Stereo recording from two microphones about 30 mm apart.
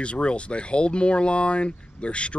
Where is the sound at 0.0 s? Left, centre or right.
Left.